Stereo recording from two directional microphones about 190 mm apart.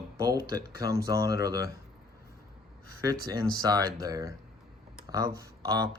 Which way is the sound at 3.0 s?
20° right (ahead or behind).